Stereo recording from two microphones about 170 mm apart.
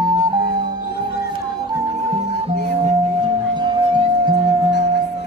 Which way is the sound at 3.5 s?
25° right (ahead or behind).